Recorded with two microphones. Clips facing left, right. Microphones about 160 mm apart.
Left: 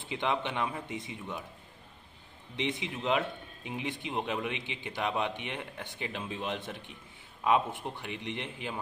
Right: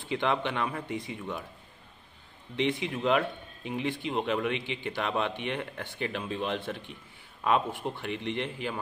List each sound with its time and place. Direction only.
0.0 s speech: 20° left (ahead or behind)
2.5 s speech: 20° left (ahead or behind)